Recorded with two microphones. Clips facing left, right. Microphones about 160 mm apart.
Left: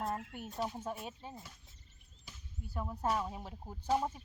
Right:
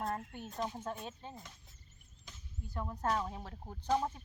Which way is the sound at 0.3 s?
10° left (ahead or behind).